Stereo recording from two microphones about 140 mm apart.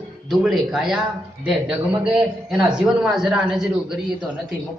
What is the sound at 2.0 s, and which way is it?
A man's voice, 5° right (ahead or behind).